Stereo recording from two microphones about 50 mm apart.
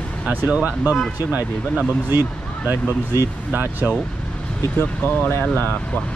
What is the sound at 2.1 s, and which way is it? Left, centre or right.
Speech, right.